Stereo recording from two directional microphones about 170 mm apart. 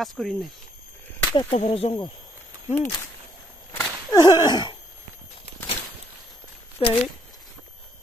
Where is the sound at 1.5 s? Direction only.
40° left (ahead or behind).